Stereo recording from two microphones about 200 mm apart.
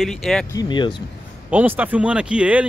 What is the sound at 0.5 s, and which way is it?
Speech, 20° left (ahead or behind).